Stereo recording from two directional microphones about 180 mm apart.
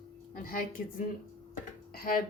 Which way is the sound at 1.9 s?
55° left (ahead or behind).